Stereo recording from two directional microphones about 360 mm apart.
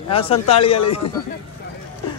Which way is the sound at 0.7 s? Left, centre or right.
Left.